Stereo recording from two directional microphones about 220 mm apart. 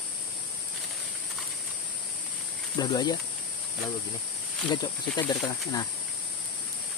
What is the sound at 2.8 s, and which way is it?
Speech, 20° left (ahead or behind).